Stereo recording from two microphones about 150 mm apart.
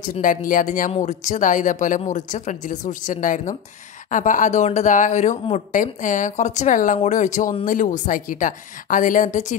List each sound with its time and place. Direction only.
0.0 s speech: 60° left (ahead or behind)